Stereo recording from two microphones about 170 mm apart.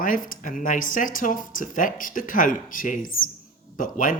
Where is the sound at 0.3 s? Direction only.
50° left (ahead or behind).